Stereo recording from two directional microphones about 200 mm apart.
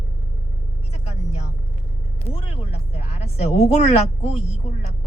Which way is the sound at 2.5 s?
30° left (ahead or behind).